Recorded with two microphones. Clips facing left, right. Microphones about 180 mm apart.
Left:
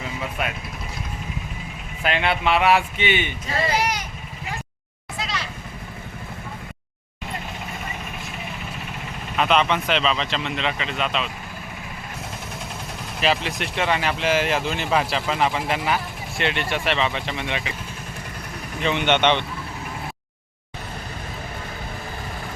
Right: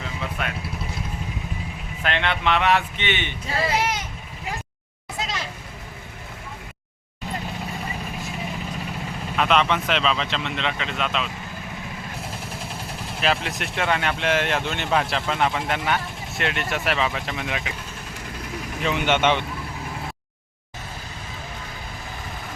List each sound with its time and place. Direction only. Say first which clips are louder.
0.2 s vehicle: left 2 dB; 10° left (ahead or behind)
2.0 s speech: left 2 dB; 10° left (ahead or behind)
3.8 s vehicle: left 1 dB; 25° right (ahead or behind)
9.3 s speech: left 1 dB; centre (ahead or behind)
13.2 s speech: left 2 dB; centre (ahead or behind)
18.8 s speech: left 1 dB; 5° right (ahead or behind)